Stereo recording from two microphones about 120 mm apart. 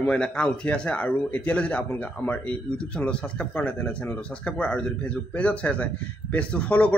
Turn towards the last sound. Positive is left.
turn(degrees=10)  # may be behind; listen again after turning